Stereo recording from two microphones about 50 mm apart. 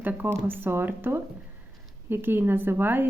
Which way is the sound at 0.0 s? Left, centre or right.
Right.